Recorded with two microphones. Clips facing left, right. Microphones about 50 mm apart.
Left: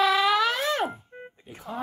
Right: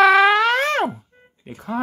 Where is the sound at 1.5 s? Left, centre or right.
Right.